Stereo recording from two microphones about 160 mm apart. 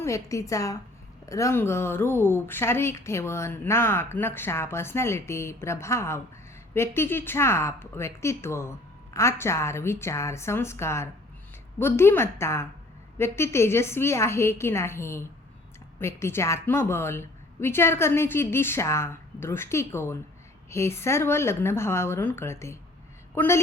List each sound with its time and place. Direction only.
0.0 s a woman's voice: 20° left (ahead or behind)